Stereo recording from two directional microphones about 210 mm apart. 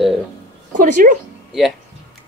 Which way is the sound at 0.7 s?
40° right (ahead or behind).